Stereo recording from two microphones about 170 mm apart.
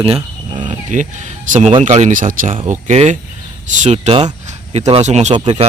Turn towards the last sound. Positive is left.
turn(degrees=-30)  # may be behind; listen again after turning